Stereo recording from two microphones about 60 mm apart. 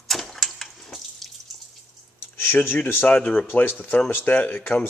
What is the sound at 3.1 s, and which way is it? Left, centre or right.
Speech, left.